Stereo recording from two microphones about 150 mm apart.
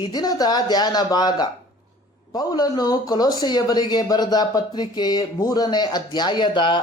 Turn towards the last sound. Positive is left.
turn(degrees=30)  # may be behind; listen again after turning